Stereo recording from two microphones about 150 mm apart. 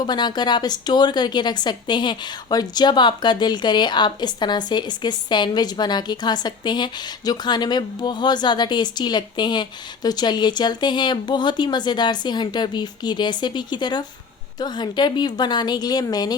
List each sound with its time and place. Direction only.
0.0 s a woman's voice: 30° left (ahead or behind)